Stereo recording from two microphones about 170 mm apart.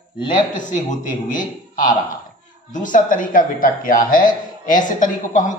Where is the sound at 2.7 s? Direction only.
50° left (ahead or behind).